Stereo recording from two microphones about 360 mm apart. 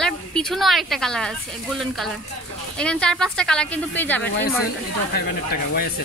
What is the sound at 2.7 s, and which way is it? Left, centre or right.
Speech, centre.